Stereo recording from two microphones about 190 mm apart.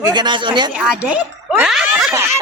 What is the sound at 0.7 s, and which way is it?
Speech, 5° right (ahead or behind).